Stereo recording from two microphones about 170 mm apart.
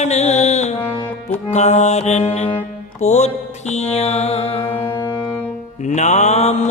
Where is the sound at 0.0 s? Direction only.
40° left (ahead or behind).